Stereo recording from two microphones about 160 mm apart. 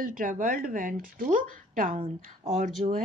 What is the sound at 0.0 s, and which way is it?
Speech, 60° right (ahead or behind).